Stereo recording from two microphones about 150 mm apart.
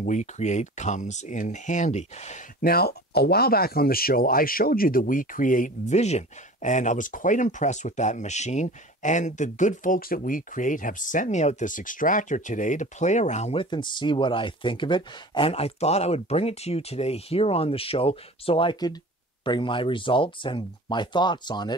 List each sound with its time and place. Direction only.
0.0 s speech: 55° left (ahead or behind)
2.6 s speech: 90° left; by 13.7 s 45° left (ahead or behind)
13.7 s speech: 30° left (ahead or behind)